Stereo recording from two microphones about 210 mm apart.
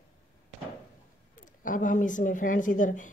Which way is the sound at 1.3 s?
40° left (ahead or behind).